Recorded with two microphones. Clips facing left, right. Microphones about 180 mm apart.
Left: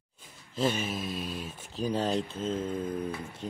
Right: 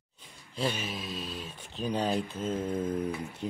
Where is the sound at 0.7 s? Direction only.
45° left (ahead or behind).